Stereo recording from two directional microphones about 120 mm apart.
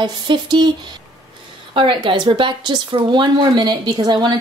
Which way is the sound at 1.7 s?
45° right (ahead or behind).